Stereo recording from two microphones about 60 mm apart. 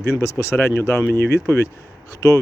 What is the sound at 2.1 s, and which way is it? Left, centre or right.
Speech, left.